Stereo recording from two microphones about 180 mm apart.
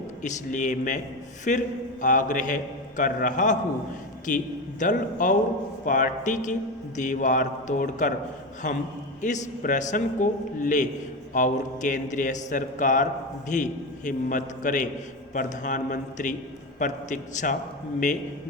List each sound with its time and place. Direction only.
0.2 s a man's voice: 45° left (ahead or behind)